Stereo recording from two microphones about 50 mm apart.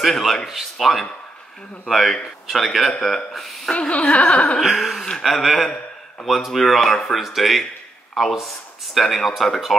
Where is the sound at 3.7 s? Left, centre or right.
Left.